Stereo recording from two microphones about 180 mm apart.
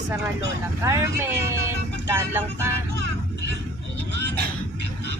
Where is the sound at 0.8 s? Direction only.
15° right (ahead or behind).